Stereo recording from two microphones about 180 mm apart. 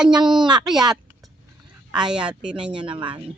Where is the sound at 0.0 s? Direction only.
5° right (ahead or behind).